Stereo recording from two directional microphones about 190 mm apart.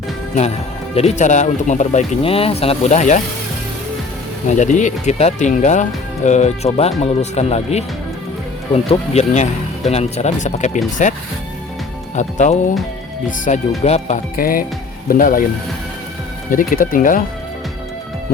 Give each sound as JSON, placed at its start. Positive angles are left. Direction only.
{"t": 0.9, "sound": "speech", "side_deg": 35}
{"t": 4.4, "sound": "speech", "side_deg": 40}
{"t": 14.3, "sound": "speech", "side_deg": 50}
{"t": 16.5, "sound": "speech", "side_deg": 45}